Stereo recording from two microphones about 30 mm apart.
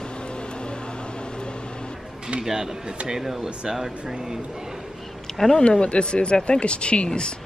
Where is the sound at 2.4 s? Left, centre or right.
Centre.